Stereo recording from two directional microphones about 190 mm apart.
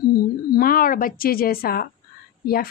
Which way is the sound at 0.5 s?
50° left (ahead or behind).